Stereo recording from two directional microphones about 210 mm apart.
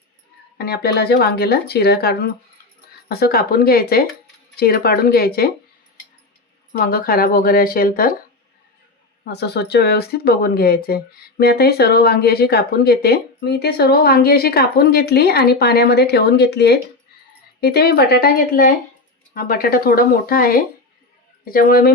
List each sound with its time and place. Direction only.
0.6 s speech: 45° left (ahead or behind)
6.7 s speech: 45° left (ahead or behind)
9.2 s speech: 50° left (ahead or behind)